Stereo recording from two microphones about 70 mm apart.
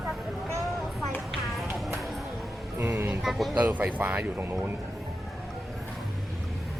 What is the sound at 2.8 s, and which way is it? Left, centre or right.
Speech, right.